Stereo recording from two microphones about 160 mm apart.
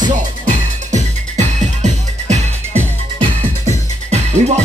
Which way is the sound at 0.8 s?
50° right (ahead or behind).